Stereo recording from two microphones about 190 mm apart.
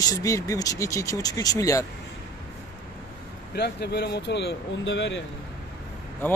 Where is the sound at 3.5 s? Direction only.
60° left (ahead or behind).